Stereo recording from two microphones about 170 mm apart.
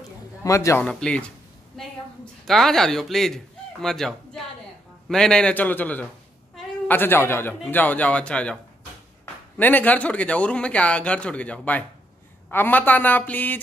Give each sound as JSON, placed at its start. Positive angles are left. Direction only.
{"t": 0.4, "sound": "speech", "side_deg": 20}
{"t": 0.8, "sound": "speech", "side_deg": 5}